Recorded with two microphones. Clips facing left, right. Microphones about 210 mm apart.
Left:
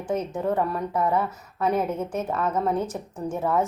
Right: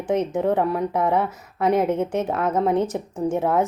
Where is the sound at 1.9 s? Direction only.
20° right (ahead or behind).